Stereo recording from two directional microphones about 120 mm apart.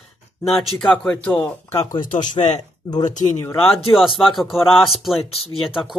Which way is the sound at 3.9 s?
Centre (ahead or behind).